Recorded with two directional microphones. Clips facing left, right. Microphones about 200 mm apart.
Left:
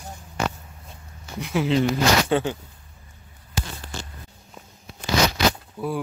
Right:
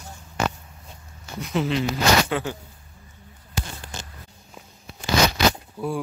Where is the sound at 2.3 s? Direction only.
25° left (ahead or behind).